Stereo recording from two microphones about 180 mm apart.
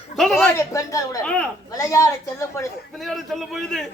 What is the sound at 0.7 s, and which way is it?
Speech, 20° left (ahead or behind).